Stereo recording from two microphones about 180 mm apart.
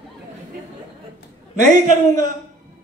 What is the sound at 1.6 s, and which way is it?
Speech, 45° right (ahead or behind).